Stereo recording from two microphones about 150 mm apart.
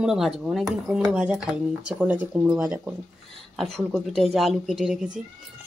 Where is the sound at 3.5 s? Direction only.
5° left (ahead or behind).